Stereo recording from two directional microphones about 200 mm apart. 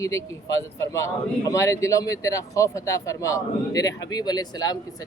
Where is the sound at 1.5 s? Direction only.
15° left (ahead or behind).